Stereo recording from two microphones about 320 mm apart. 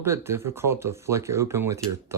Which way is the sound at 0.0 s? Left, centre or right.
Centre.